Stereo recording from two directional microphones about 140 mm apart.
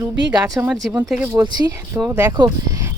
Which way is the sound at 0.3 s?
25° right (ahead or behind).